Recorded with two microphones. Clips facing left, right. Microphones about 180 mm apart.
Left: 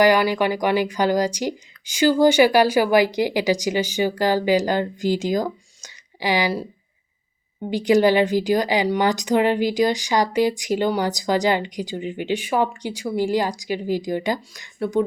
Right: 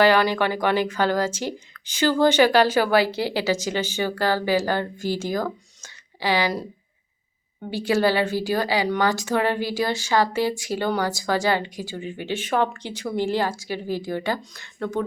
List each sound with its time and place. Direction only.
0.0 s speech: 10° left (ahead or behind)
7.7 s speech: 15° left (ahead or behind)